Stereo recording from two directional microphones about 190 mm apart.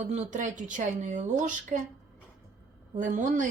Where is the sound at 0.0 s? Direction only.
35° right (ahead or behind).